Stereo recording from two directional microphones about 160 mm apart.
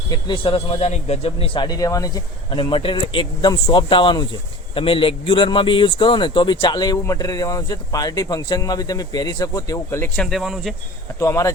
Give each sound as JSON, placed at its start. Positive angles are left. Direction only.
{"t": 0.1, "sound": "speech", "side_deg": 30}
{"t": 10.2, "sound": "speech", "side_deg": 0}
{"t": 11.2, "sound": "speech", "side_deg": 20}